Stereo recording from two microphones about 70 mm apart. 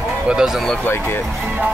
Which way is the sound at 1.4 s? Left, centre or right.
Right.